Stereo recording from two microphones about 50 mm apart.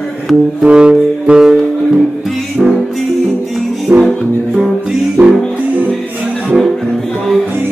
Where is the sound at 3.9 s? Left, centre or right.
Right.